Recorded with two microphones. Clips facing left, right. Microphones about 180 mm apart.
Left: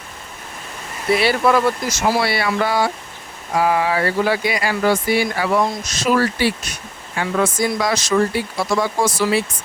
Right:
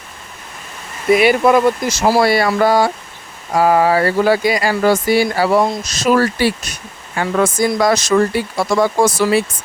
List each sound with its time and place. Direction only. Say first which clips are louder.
1.1 s speech: right 5 dB; 15° right (ahead or behind)
1.9 s speech: right 5 dB; 35° right (ahead or behind); by 9.4 s 55° right (ahead or behind)